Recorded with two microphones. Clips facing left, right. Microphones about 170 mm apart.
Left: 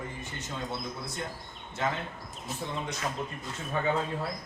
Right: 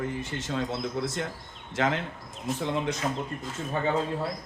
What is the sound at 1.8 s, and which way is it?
Speech, 90° right.